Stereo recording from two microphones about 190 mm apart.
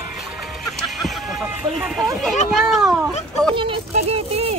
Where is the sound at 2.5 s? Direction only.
Centre (ahead or behind).